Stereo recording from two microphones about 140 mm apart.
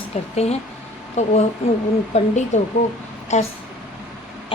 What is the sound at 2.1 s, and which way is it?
Speech, 55° left (ahead or behind).